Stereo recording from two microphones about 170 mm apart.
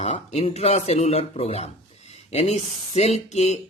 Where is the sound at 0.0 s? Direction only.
40° left (ahead or behind).